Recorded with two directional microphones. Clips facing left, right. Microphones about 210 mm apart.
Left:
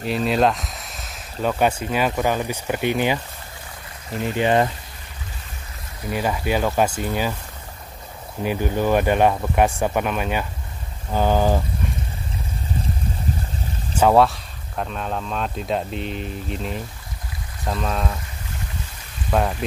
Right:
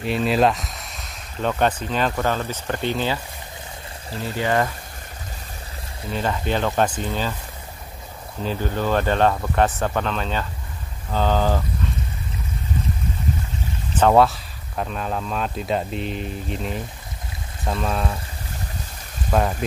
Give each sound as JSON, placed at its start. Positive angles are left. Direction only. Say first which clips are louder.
{"t": 0.0, "sound": "speech", "louder": "even", "side_deg": 0}
{"t": 4.2, "sound": "speech", "louder": "left 3 dB", "side_deg": 20}
{"t": 6.0, "sound": "speech", "louder": "left 1 dB", "side_deg": 10}
{"t": 8.4, "sound": "speech", "louder": "left 3 dB", "side_deg": 15}
{"t": 13.9, "sound": "speech", "louder": "even", "side_deg": 5}
{"t": 19.3, "sound": "speech", "louder": "even", "side_deg": 0}